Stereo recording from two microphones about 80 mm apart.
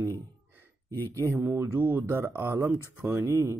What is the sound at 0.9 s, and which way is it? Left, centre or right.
Speech, left.